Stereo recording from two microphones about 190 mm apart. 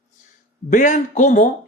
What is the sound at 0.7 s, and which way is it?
Speech, 40° left (ahead or behind).